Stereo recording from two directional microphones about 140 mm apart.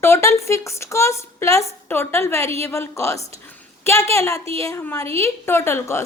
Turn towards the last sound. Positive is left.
turn(degrees=20)  # may be behind; listen again after turning